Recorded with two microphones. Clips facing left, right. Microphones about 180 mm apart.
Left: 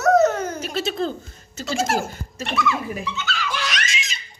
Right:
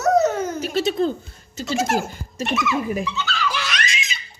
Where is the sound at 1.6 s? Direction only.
20° right (ahead or behind).